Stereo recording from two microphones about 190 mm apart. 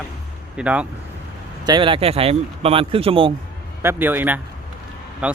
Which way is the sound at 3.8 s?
10° right (ahead or behind).